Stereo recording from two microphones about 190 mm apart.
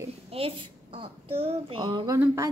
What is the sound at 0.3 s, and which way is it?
A woman's voice, 30° right (ahead or behind).